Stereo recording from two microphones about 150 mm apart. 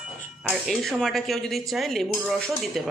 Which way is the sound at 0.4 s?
Centre (ahead or behind).